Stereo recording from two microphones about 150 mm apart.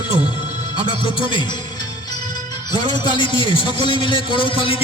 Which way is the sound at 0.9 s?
35° left (ahead or behind).